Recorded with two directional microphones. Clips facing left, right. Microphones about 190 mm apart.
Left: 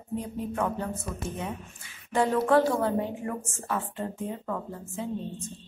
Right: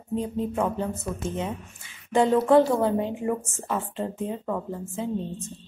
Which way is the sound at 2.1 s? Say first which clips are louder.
Right 4 dB; 20° right (ahead or behind).